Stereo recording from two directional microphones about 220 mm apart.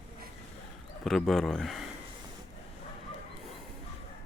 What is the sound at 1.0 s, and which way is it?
Speech, centre (ahead or behind).